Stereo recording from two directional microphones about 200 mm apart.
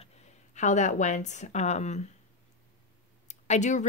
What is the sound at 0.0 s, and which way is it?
Speech, 35° left (ahead or behind).